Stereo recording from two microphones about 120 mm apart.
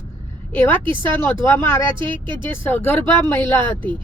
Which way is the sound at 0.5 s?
20° left (ahead or behind).